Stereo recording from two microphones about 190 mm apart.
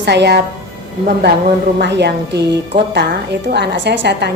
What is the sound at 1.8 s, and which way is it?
A woman's voice, 60° right (ahead or behind).